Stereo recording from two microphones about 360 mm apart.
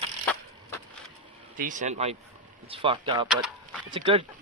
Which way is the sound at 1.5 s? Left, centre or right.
Right.